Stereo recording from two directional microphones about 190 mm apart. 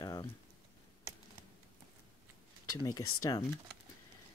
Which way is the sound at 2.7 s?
15° left (ahead or behind).